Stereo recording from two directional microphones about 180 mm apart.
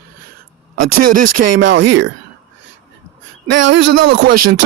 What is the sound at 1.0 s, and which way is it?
Speech, 55° right (ahead or behind).